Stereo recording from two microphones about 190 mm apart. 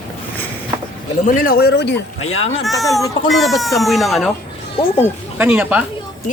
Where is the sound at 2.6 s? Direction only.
Centre (ahead or behind).